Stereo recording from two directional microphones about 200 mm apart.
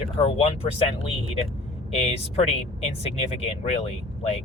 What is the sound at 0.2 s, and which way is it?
Speech, 30° left (ahead or behind).